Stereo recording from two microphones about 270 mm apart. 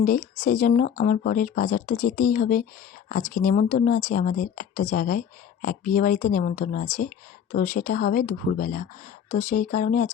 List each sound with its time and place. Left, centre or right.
0.0 s speech: left